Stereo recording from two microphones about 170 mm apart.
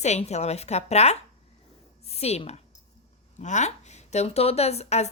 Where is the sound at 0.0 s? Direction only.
40° left (ahead or behind).